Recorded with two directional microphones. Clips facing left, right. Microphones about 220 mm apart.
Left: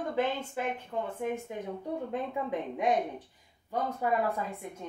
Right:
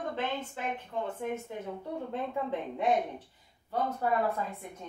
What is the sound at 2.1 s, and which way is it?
A woman's voice, 15° left (ahead or behind).